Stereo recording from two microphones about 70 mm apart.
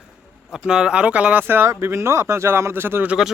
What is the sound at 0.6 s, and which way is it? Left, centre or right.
Speech, centre.